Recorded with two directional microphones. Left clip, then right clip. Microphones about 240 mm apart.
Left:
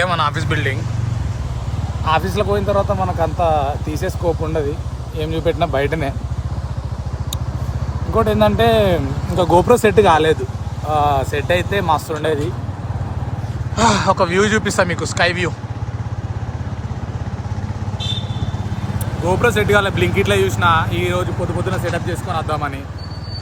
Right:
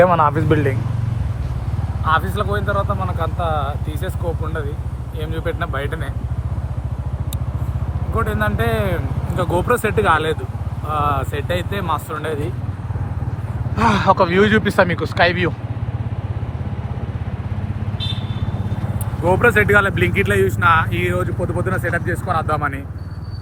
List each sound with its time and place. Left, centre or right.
0.0 s speech: centre
2.1 s speech: left
5.1 s speech: left
8.1 s speech: left
11.3 s speech: right
11.8 s speech: left
13.7 s speech: centre
19.2 s speech: left